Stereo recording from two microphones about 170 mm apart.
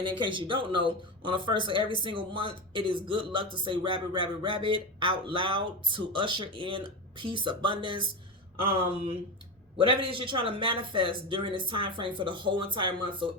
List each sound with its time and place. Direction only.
0.2 s speech: 30° right (ahead or behind)
9.7 s speech: 30° right (ahead or behind)